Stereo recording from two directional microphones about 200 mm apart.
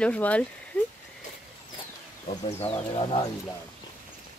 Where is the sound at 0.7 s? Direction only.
10° left (ahead or behind).